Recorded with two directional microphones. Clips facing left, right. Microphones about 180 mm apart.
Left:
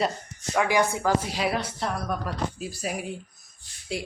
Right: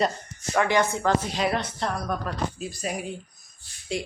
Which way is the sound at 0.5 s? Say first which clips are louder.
Right 1 dB; 10° left (ahead or behind).